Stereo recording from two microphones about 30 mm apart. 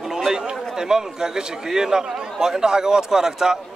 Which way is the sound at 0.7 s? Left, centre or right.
Centre.